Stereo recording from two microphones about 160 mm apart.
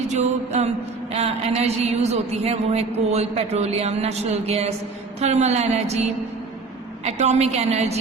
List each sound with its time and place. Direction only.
0.1 s a woman's voice: 45° right (ahead or behind)